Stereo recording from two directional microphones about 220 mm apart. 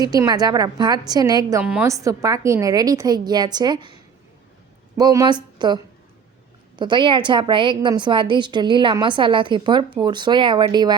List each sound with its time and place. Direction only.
0.0 s a woman's voice: 15° right (ahead or behind)
1.6 s a woman's voice: 5° right (ahead or behind)
4.9 s a woman's voice: 20° right (ahead or behind)